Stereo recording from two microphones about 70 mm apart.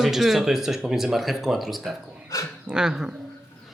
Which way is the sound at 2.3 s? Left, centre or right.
Left.